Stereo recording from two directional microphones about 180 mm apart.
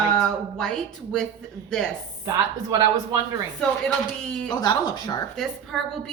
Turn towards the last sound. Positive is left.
turn(degrees=0)  # may be behind; listen again after turning